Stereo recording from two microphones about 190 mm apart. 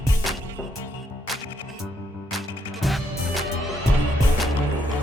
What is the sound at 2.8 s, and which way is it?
Music, centre (ahead or behind).